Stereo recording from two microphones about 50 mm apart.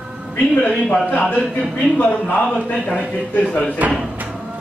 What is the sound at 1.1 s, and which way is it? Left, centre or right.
A man's voice, left.